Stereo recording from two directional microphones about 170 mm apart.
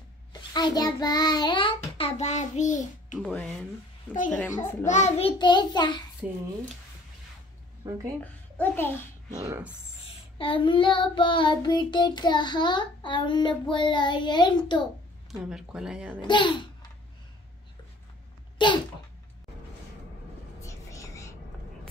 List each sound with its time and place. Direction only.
0.3 s child singing: 25° left (ahead or behind); by 3.2 s 45° left (ahead or behind)
3.2 s speech: 5° left (ahead or behind)
4.1 s a child's voice: 45° left (ahead or behind)
4.4 s a child's voice: 15° left (ahead or behind)
4.8 s child singing: 45° left (ahead or behind); by 6.0 s 25° left (ahead or behind)
7.8 s speech: 20° right (ahead or behind)
8.2 s a woman's voice: 10° left (ahead or behind)
9.3 s speech: 20° right (ahead or behind)
10.3 s child singing: 30° left (ahead or behind)
15.4 s speech: 5° right (ahead or behind)
16.2 s child singing: 30° left (ahead or behind)
18.6 s sneeze: 30° left (ahead or behind)
20.6 s whispering: 20° left (ahead or behind)